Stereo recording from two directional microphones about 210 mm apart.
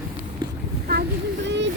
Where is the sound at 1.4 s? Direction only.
60° right (ahead or behind).